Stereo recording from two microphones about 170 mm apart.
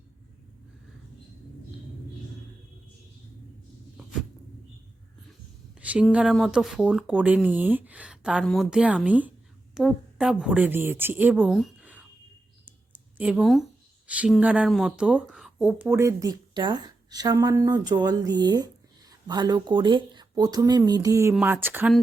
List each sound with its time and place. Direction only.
5.8 s a woman's voice: 10° right (ahead or behind)
12.6 s a sound: 10° right (ahead or behind)
14.1 s speech: 5° right (ahead or behind)